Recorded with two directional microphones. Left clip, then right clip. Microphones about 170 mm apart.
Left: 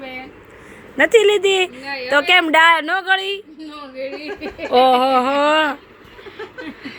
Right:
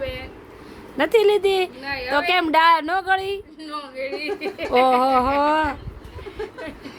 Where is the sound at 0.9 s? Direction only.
5° left (ahead or behind).